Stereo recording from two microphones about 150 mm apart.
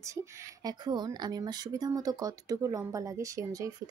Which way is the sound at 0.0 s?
20° right (ahead or behind).